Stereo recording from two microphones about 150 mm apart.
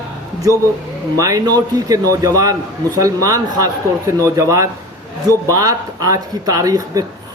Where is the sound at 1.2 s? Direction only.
25° right (ahead or behind).